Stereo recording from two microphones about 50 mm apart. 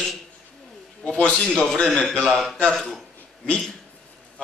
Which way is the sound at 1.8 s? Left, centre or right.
Centre.